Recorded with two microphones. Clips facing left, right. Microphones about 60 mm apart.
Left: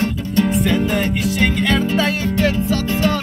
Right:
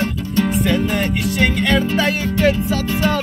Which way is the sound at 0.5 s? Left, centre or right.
Centre.